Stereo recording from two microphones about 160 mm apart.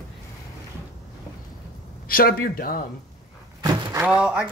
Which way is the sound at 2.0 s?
65° left (ahead or behind).